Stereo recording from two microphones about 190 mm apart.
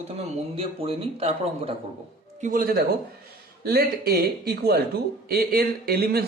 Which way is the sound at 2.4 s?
45° right (ahead or behind).